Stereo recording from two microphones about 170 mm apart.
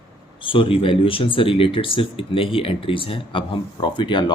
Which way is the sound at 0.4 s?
30° left (ahead or behind).